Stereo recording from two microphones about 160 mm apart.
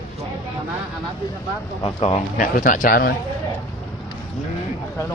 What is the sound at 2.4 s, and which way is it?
Speech, 55° left (ahead or behind).